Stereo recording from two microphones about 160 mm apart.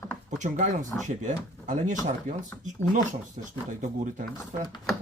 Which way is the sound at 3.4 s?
45° right (ahead or behind).